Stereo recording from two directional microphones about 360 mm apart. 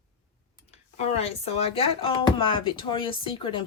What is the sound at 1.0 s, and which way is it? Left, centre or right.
Speech, centre.